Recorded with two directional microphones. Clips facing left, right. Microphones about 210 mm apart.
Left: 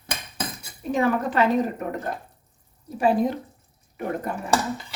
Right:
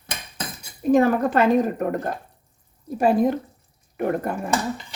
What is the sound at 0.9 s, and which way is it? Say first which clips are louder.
Speech: right 5 dB; 45° right (ahead or behind).